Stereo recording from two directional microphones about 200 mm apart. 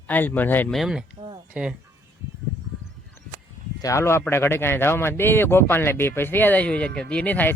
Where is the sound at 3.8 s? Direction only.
15° left (ahead or behind).